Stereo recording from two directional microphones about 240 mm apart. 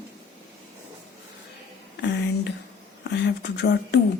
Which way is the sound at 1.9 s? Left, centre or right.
Left.